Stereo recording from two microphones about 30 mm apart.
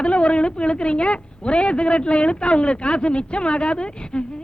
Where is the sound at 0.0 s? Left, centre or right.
Left.